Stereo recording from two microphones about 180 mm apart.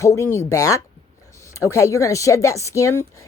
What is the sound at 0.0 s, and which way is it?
Speech, 15° left (ahead or behind).